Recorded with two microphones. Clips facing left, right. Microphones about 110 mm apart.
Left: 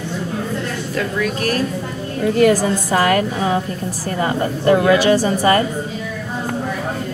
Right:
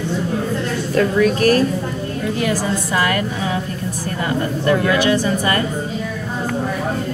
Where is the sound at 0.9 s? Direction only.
40° right (ahead or behind).